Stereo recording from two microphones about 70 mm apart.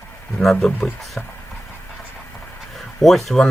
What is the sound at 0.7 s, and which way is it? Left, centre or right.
Speech, left.